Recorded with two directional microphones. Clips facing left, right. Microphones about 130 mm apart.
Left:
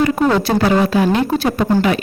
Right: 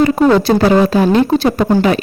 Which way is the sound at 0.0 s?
30° right (ahead or behind).